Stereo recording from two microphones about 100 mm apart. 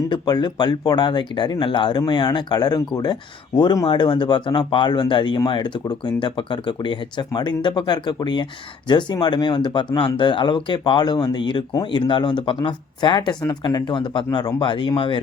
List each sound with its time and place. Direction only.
0.1 s speech: 45° left (ahead or behind)
14.3 s speech: 40° left (ahead or behind)